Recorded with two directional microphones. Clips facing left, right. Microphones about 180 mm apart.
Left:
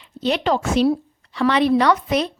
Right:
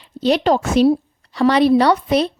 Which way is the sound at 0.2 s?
35° right (ahead or behind).